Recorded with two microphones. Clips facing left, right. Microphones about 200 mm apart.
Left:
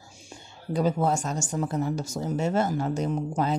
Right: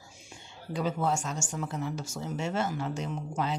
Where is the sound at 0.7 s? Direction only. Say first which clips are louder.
Left 5 dB; 40° left (ahead or behind).